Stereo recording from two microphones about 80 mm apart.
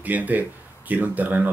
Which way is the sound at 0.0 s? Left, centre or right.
Right.